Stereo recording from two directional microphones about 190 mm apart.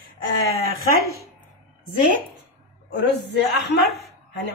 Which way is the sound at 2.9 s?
60° left (ahead or behind).